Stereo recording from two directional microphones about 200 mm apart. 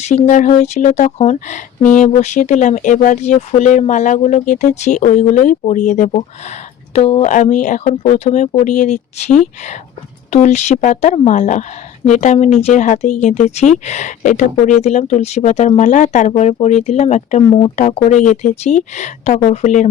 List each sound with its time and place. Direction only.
0.0 s speech: 35° left (ahead or behind)